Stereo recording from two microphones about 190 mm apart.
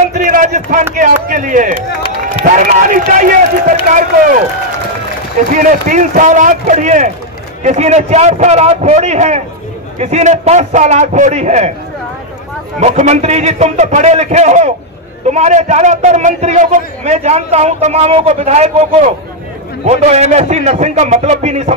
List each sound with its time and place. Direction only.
0.3 s a man's voice: 45° right (ahead or behind)
5.5 s a man's voice: 45° right (ahead or behind)
12.8 s a man's voice: 35° right (ahead or behind)